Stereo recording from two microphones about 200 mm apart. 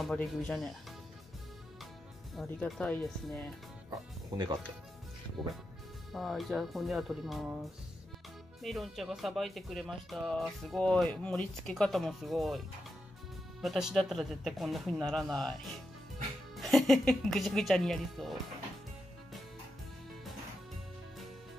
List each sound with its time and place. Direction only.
0.0 s speech: centre (ahead or behind)
2.4 s speech: 10° left (ahead or behind)
6.1 s speech: centre (ahead or behind)
8.6 s speech: centre (ahead or behind)